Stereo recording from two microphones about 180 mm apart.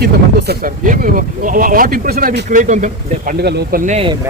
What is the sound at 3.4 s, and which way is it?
Speech, 65° right (ahead or behind).